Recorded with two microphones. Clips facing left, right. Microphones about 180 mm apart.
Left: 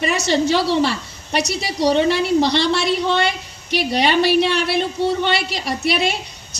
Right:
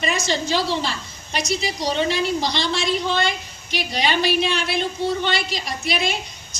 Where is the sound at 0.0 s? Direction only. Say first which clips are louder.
Left 5 dB; 70° left (ahead or behind).